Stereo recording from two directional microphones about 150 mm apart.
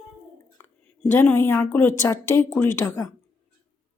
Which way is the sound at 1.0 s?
15° left (ahead or behind).